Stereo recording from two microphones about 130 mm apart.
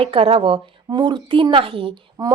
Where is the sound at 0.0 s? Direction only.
45° right (ahead or behind).